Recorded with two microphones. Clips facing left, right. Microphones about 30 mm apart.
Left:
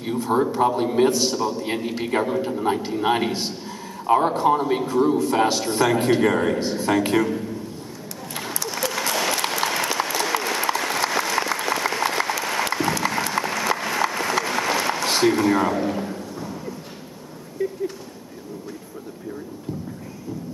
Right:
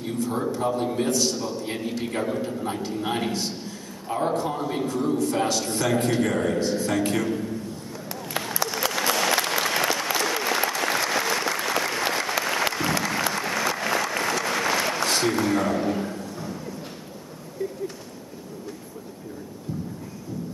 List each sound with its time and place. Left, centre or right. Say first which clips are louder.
0.0 s a man's voice: left 5 dB; centre
1.3 s speech: left 5 dB; centre
1.6 s a man's voice: left 3 dB; centre
8.8 s applause: even; centre
9.4 s applause: even; centre
13.1 s a sound: left 2 dB; centre
14.4 s applause: left 1 dB; centre
15.0 s a sound: left 7 dB; centre